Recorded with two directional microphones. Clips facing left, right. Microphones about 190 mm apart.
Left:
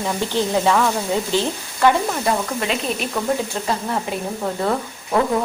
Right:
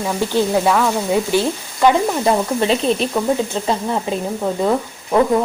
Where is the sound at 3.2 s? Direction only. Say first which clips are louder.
Right 4 dB; 20° right (ahead or behind).